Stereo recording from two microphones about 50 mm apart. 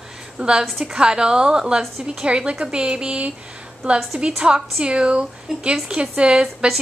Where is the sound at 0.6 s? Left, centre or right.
Centre.